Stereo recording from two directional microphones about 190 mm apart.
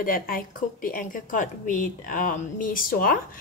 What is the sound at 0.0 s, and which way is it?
A woman's voice, 50° left (ahead or behind).